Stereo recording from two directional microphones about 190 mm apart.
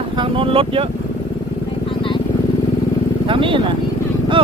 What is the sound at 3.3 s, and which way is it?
Speech, 25° right (ahead or behind).